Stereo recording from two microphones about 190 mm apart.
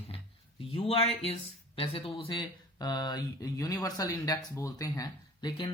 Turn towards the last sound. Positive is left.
turn(degrees=20)  # may be behind; listen again after turning